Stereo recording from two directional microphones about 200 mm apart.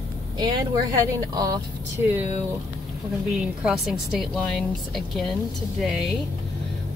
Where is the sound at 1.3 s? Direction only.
20° right (ahead or behind).